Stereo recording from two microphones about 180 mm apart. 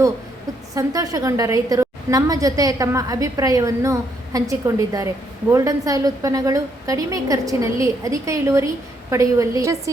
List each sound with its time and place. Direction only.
0.7 s a woman's voice: 20° right (ahead or behind)